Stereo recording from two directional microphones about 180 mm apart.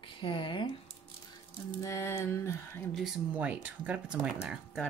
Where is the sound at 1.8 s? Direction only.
15° left (ahead or behind).